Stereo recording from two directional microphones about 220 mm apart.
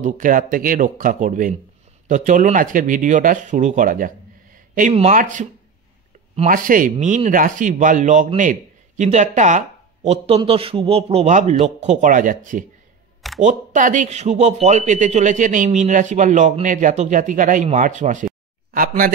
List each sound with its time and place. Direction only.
0.0 s a man's voice: 35° right (ahead or behind)